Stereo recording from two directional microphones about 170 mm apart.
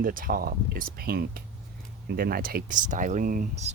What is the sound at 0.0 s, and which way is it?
Speech, 55° right (ahead or behind).